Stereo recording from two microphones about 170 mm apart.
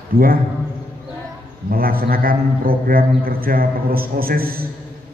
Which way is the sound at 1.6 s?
60° right (ahead or behind).